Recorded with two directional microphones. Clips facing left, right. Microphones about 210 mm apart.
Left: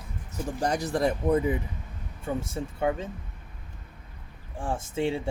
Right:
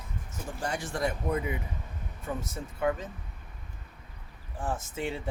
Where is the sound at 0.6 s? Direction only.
40° left (ahead or behind).